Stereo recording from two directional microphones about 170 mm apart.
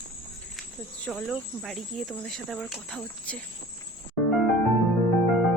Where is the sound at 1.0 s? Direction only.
Centre (ahead or behind).